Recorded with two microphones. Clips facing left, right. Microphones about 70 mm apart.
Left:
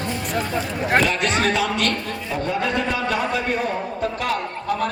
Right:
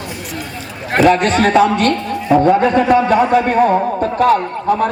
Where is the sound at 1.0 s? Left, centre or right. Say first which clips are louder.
Right 9 dB; right.